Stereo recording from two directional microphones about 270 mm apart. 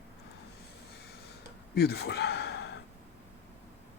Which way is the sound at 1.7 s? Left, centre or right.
Left.